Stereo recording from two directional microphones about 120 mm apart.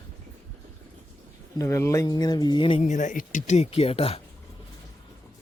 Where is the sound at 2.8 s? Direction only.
90° left; by 4.2 s 55° left (ahead or behind).